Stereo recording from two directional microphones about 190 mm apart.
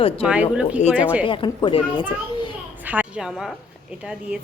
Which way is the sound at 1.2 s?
25° left (ahead or behind).